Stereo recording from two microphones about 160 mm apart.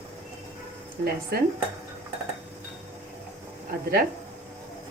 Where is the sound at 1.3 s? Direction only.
75° right (ahead or behind).